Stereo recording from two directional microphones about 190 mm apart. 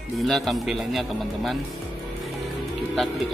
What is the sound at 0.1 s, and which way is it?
Speech, centre (ahead or behind).